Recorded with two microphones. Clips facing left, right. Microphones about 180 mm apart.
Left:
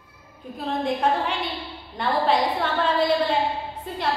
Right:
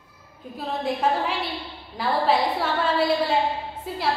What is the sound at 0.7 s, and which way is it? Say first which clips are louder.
A woman's voice: left 1 dB; 5° right (ahead or behind).